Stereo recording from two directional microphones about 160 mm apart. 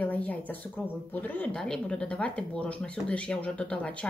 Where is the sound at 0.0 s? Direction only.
10° left (ahead or behind).